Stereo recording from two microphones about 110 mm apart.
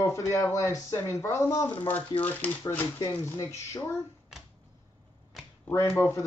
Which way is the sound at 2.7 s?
25° left (ahead or behind).